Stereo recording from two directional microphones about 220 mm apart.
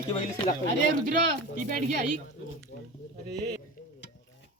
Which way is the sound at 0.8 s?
40° right (ahead or behind).